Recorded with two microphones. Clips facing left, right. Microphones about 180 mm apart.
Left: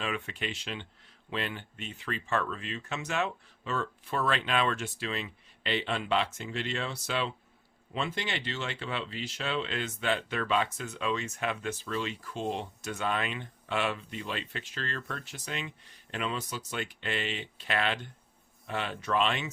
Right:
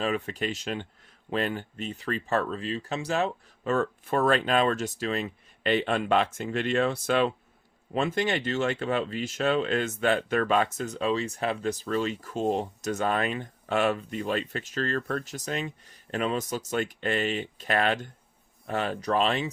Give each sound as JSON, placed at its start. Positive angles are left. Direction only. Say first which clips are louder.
{"t": 0.0, "sound": "speech", "louder": "right 6 dB", "side_deg": -40}
{"t": 3.7, "sound": "speech", "louder": "right 7 dB", "side_deg": -50}